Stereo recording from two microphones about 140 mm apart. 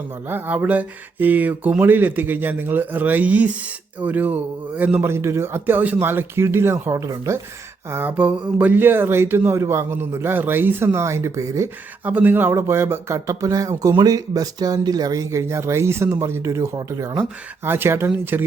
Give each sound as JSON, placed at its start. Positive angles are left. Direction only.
{"t": 0.3, "sound": "speech", "side_deg": -15}
{"t": 12.0, "sound": "speech", "side_deg": -10}